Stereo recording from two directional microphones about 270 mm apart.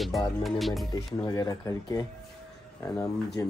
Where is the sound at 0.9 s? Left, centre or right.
Centre.